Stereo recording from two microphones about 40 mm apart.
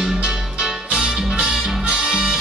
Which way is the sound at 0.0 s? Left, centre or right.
Centre.